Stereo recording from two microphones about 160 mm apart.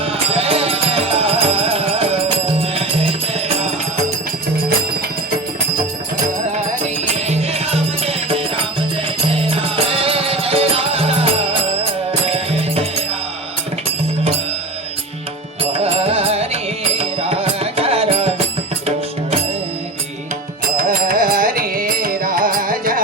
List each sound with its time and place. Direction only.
0.0 s music: 40° right (ahead or behind)
7.3 s music: 40° right (ahead or behind)
9.6 s music: 35° right (ahead or behind)
12.3 s music: 40° right (ahead or behind)
15.7 s music: 40° right (ahead or behind)
20.7 s music: 65° right (ahead or behind)